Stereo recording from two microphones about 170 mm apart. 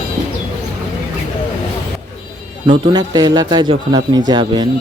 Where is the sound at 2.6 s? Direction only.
25° right (ahead or behind).